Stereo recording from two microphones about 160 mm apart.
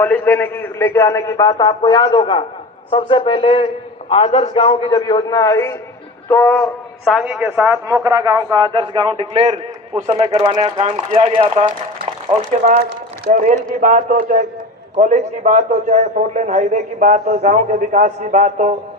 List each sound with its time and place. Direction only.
0.0 s a man's voice: 10° left (ahead or behind)
6.2 s music: 10° left (ahead or behind)
7.0 s a man's voice: 5° right (ahead or behind); by 10.8 s 30° right (ahead or behind)
10.8 s speech: 40° right (ahead or behind)
13.3 s a man's voice: 55° right (ahead or behind)